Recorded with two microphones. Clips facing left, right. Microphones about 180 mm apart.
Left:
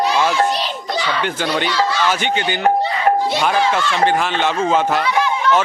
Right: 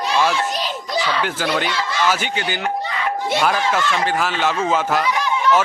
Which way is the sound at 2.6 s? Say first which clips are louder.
Left 7 dB; 40° left (ahead or behind).